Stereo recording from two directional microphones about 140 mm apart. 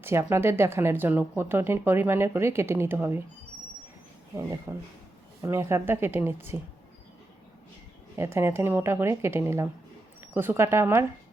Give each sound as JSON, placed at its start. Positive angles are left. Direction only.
{"t": 0.0, "sound": "speech", "side_deg": -15}
{"t": 4.7, "sound": "speech", "side_deg": -15}
{"t": 8.2, "sound": "speech", "side_deg": -15}